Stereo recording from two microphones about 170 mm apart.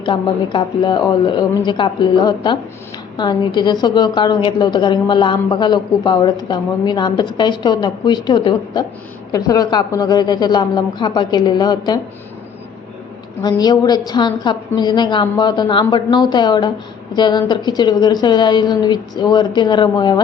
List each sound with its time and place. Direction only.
0.0 s a woman's voice: 30° left (ahead or behind)
13.4 s a woman's voice: 25° left (ahead or behind)